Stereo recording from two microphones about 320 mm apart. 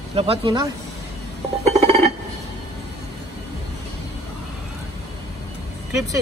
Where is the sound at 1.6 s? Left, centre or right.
Centre.